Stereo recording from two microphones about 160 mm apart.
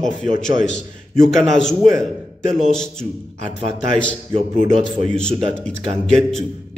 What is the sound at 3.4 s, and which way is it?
A man's voice, 40° right (ahead or behind).